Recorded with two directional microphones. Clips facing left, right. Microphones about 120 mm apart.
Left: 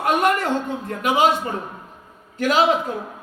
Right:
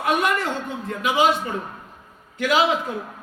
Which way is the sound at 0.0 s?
50° left (ahead or behind).